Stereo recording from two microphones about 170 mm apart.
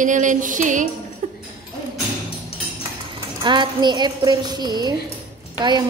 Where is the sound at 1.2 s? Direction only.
50° right (ahead or behind).